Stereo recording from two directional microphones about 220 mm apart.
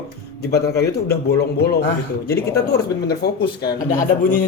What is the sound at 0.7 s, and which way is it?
Speech, 45° left (ahead or behind).